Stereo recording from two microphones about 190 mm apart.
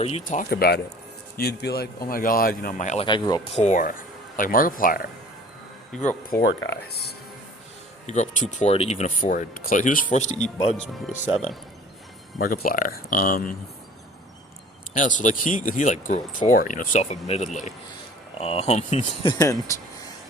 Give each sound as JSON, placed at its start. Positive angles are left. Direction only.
{"t": 0.0, "sound": "a man's voice", "side_deg": 40}
{"t": 3.1, "sound": "speech", "side_deg": 20}
{"t": 3.5, "sound": "speech", "side_deg": 40}
{"t": 6.3, "sound": "a man's voice", "side_deg": 55}
{"t": 8.0, "sound": "speech", "side_deg": 35}
{"t": 12.4, "sound": "speech", "side_deg": 50}
{"t": 14.9, "sound": "speech", "side_deg": 40}
{"t": 19.3, "sound": "speech", "side_deg": 15}